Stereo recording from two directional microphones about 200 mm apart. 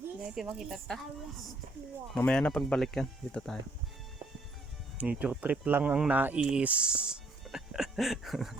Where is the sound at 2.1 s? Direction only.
5° left (ahead or behind).